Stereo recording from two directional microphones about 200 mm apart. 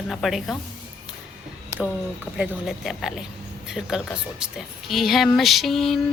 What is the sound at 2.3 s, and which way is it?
A woman's voice, 5° right (ahead or behind).